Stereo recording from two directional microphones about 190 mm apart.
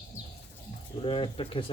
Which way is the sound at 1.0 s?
25° left (ahead or behind).